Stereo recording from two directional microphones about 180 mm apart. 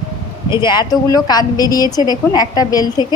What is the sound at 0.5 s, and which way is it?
A woman's voice, 25° left (ahead or behind).